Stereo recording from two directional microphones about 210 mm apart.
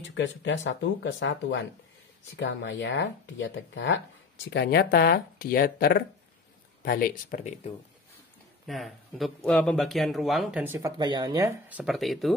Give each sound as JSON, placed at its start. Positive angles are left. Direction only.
{"t": 0.0, "sound": "speech", "side_deg": 60}
{"t": 8.6, "sound": "speech", "side_deg": 0}
{"t": 11.0, "sound": "speech", "side_deg": -20}
{"t": 11.8, "sound": "speech", "side_deg": 0}